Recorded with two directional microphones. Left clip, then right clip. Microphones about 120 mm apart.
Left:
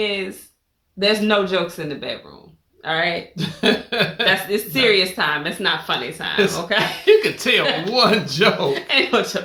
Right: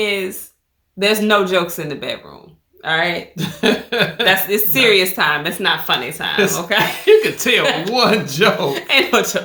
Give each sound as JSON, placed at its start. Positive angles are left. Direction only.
{"t": 0.0, "sound": "speech", "side_deg": -40}
{"t": 3.3, "sound": "a sound", "side_deg": 5}
{"t": 4.3, "sound": "speech", "side_deg": -40}
{"t": 6.3, "sound": "speech", "side_deg": 0}
{"t": 7.0, "sound": "a sound", "side_deg": 10}
{"t": 7.9, "sound": "speech", "side_deg": 5}
{"t": 8.7, "sound": "speech", "side_deg": -35}